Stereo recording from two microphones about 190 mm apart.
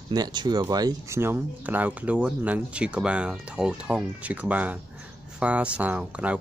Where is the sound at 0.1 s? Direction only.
20° right (ahead or behind).